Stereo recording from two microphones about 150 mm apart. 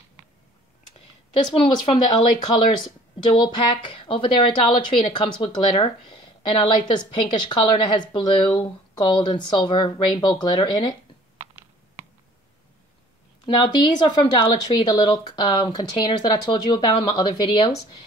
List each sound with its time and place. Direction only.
1.5 s a woman's voice: 35° left (ahead or behind)
13.6 s speech: 30° left (ahead or behind)